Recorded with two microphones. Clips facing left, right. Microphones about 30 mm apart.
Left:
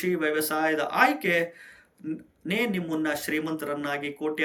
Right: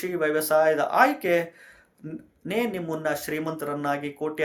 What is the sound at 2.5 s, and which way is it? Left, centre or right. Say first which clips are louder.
Speech: even; left.